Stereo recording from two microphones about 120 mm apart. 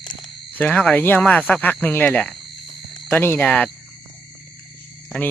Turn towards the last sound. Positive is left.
turn(degrees=10)  # may be behind; listen again after turning